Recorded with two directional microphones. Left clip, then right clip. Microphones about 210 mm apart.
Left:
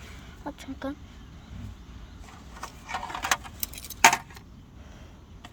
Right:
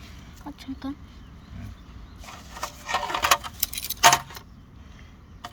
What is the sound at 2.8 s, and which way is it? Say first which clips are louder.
Rodents: right 7 dB; 40° right (ahead or behind).